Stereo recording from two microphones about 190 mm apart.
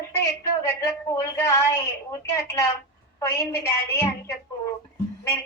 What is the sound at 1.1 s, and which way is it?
A woman's voice, 15° left (ahead or behind).